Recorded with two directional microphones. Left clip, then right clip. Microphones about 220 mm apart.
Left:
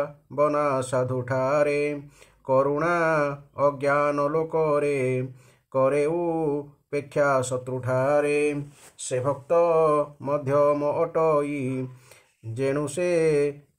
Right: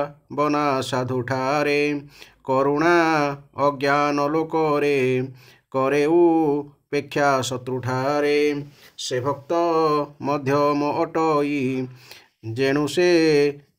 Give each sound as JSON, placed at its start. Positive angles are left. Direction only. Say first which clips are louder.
{"t": 0.0, "sound": "speech", "louder": "right 1 dB", "side_deg": -40}